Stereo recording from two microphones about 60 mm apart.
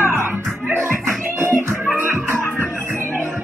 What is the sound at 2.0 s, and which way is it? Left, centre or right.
Music, right.